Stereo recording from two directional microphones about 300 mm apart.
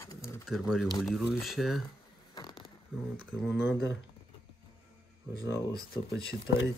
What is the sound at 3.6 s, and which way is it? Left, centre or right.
Speech, left.